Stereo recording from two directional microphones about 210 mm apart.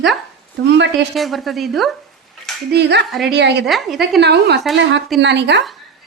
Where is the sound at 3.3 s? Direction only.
55° right (ahead or behind).